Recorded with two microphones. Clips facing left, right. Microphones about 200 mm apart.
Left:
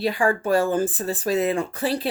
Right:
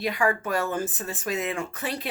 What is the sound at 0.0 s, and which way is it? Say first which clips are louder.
A woman's voice: left 4 dB; 30° left (ahead or behind).